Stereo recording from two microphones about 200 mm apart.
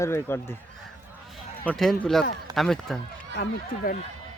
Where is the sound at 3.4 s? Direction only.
45° left (ahead or behind).